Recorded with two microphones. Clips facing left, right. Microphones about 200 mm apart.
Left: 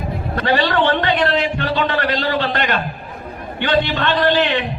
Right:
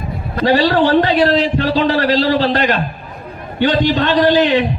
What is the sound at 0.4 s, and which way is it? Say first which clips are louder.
A man's voice: right 5 dB; 35° right (ahead or behind).